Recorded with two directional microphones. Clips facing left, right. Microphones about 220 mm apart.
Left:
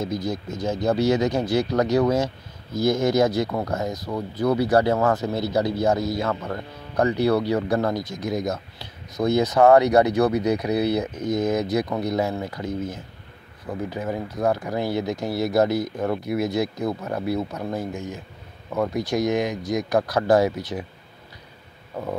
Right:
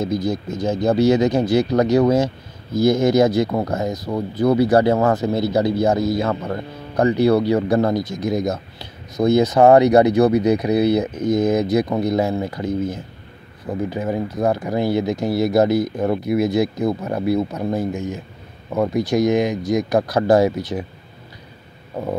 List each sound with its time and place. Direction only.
0.7 s speech: 25° right (ahead or behind)
13.7 s speech: 20° right (ahead or behind)